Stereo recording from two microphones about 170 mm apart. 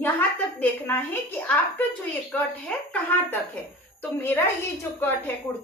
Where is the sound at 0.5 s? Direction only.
10° left (ahead or behind).